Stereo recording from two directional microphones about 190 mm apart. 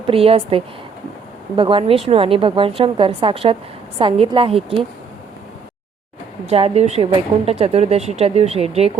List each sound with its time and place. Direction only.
0.1 s a woman's voice: 30° right (ahead or behind)
6.5 s speech: 30° right (ahead or behind)